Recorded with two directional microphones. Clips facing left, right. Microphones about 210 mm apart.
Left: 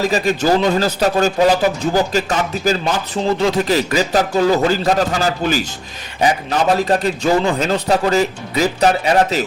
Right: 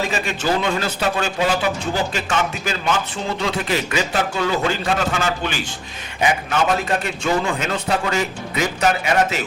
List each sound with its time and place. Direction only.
0.0 s a man's voice: 40° left (ahead or behind)